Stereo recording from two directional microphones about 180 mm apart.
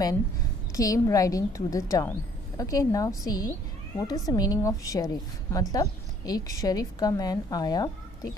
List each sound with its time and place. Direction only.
0.7 s a woman's voice: 20° left (ahead or behind)